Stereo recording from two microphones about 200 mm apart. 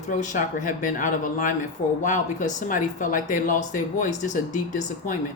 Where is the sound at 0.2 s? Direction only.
40° left (ahead or behind).